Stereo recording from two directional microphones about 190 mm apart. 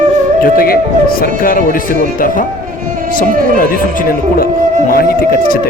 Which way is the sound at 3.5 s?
50° left (ahead or behind).